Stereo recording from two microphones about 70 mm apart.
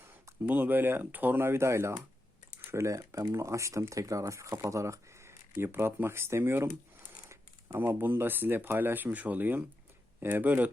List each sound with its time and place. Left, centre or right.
0.4 s speech: right
7.8 s speech: right